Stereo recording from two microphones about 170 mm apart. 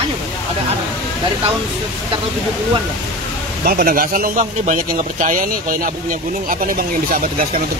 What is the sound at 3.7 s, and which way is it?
Speech, 65° right (ahead or behind).